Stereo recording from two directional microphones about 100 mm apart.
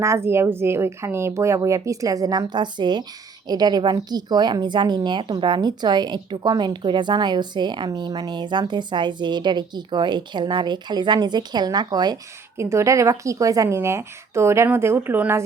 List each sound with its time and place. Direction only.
0.0 s speech: 25° right (ahead or behind)
12.5 s a woman's voice: 30° right (ahead or behind)